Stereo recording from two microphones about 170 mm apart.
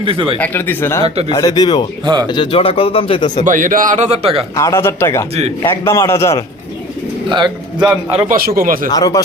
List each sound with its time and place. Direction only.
0.0 s speech: 35° right (ahead or behind)
0.3 s a man's voice: 10° left (ahead or behind)
1.0 s speech: 35° right (ahead or behind)
1.3 s speech: 25° left (ahead or behind)
3.4 s speech: 50° right (ahead or behind)
4.5 s a man's voice: 15° left (ahead or behind)
7.3 s speech: 25° right (ahead or behind)
8.3 s speech: 60° right (ahead or behind)
8.9 s speech: 20° left (ahead or behind)